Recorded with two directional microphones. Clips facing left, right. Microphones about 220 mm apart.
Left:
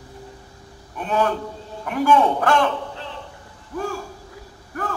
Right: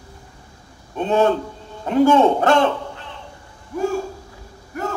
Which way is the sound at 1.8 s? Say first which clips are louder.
Right 4 dB; 25° right (ahead or behind).